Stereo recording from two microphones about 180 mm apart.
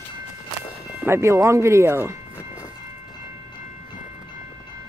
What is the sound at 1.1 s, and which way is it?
Speech, 15° right (ahead or behind).